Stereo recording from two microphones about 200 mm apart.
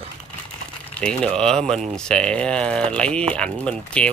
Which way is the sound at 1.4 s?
5° left (ahead or behind).